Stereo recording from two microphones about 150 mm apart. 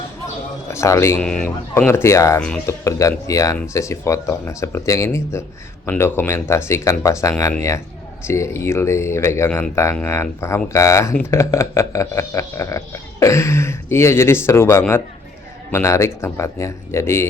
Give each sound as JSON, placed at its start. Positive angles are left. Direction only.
{"t": 0.7, "sound": "speech", "side_deg": 20}
{"t": 1.2, "sound": "speech", "side_deg": 5}
{"t": 1.9, "sound": "a man's voice", "side_deg": 20}